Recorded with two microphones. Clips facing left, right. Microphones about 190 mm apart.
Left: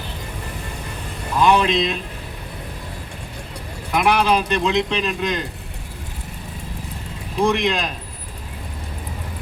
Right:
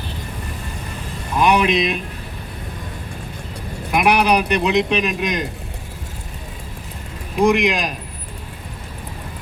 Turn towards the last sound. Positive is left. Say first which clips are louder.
# right 3 dB
turn(degrees=-15)  # may be behind; listen again after turning